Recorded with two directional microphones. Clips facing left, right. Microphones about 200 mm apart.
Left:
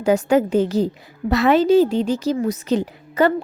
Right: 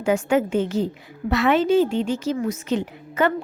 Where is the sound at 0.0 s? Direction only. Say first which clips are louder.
Left 3 dB; 35° left (ahead or behind).